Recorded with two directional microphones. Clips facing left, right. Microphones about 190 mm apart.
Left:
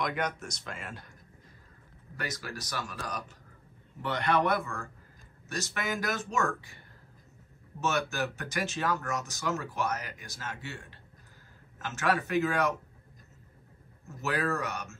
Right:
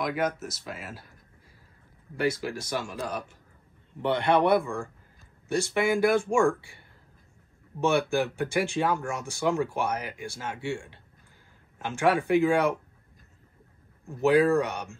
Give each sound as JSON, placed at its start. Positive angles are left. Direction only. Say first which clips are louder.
{"t": 0.0, "sound": "speech", "louder": "right 4 dB", "side_deg": -5}
{"t": 2.7, "sound": "speech", "louder": "right 4 dB", "side_deg": -25}
{"t": 7.8, "sound": "speech", "louder": "right 6 dB", "side_deg": -15}
{"t": 14.0, "sound": "speech", "louder": "right 11 dB", "side_deg": -15}